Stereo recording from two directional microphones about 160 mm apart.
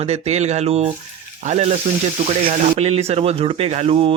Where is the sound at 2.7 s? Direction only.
40° right (ahead or behind).